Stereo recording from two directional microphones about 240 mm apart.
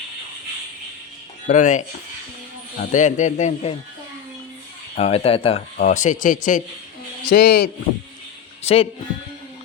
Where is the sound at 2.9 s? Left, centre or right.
Left.